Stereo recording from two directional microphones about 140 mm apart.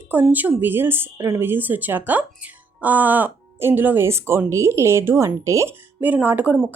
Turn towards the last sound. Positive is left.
turn(degrees=-10)  # may be behind; listen again after turning